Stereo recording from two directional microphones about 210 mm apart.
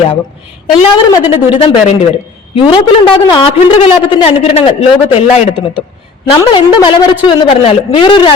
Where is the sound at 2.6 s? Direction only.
20° left (ahead or behind).